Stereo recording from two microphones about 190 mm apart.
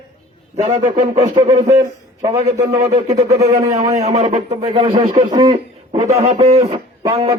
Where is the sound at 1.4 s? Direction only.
25° right (ahead or behind).